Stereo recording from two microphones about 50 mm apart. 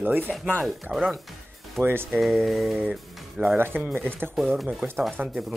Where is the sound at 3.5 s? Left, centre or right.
Right.